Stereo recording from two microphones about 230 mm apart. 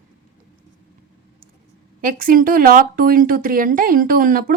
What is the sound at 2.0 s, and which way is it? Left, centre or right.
Speech, right.